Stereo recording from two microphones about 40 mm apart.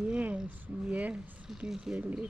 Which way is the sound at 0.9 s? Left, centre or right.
Right.